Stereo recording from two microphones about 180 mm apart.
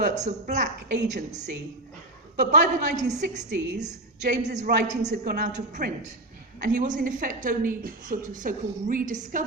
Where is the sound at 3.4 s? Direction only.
70° right (ahead or behind).